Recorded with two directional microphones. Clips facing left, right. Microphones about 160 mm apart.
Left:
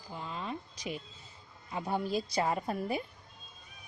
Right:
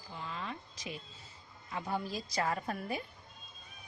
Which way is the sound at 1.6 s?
25° left (ahead or behind).